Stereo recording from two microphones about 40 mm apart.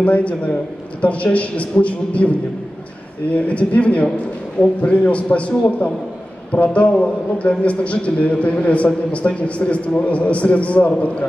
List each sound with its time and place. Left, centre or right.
0.0 s a man's voice: left
6.5 s a man's voice: left